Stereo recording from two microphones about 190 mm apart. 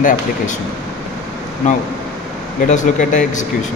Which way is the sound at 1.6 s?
40° left (ahead or behind).